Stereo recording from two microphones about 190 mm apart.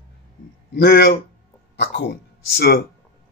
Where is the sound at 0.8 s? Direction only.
60° left (ahead or behind).